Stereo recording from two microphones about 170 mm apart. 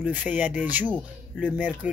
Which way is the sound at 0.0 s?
10° right (ahead or behind).